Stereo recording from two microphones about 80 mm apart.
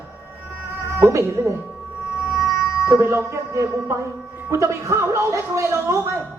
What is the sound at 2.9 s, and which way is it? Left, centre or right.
Speech, right.